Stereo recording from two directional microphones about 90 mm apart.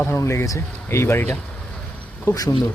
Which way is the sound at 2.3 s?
45° left (ahead or behind).